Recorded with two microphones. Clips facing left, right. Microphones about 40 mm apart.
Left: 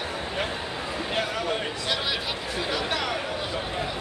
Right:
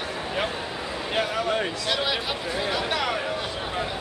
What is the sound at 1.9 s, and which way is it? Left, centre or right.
Speech, centre.